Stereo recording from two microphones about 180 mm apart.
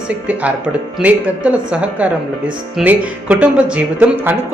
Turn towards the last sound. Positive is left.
turn(degrees=-10)  # may be behind; listen again after turning